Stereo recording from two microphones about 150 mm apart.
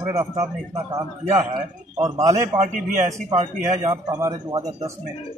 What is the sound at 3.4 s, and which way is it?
Speech, 45° right (ahead or behind).